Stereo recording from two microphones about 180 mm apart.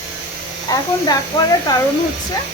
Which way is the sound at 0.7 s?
20° left (ahead or behind).